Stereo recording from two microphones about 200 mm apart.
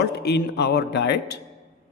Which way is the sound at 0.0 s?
55° left (ahead or behind).